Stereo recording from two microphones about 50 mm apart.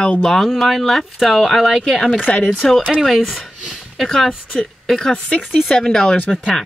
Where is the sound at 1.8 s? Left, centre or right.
Centre.